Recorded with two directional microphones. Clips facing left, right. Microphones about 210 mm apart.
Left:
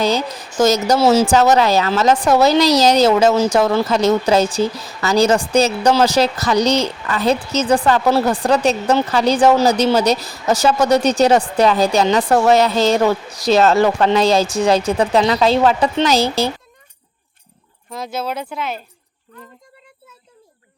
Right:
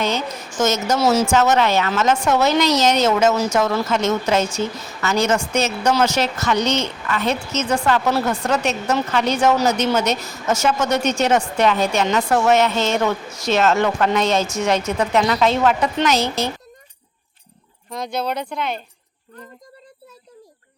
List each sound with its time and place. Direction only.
0.0 s speech: 35° left (ahead or behind)
17.9 s speech: 5° left (ahead or behind)